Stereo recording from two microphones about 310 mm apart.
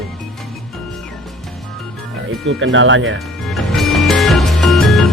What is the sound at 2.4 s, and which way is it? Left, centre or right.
Speech, right.